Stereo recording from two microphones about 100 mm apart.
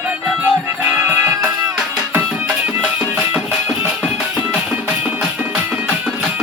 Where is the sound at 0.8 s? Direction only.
25° right (ahead or behind).